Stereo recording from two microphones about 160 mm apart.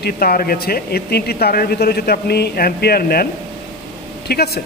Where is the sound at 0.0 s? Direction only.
70° left (ahead or behind).